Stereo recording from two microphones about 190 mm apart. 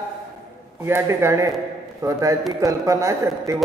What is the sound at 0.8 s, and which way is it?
A man's voice, 15° right (ahead or behind).